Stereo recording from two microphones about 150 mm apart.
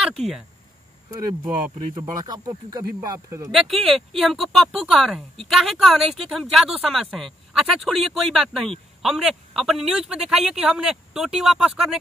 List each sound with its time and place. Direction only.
2.0 s speech: 25° right (ahead or behind)
3.5 s a woman's voice: centre (ahead or behind)